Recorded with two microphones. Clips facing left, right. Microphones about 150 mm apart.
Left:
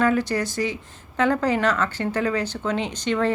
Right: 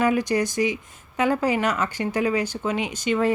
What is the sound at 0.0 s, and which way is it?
Speech, 15° right (ahead or behind).